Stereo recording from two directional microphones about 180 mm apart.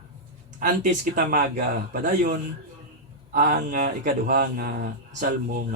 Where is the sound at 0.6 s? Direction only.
50° right (ahead or behind).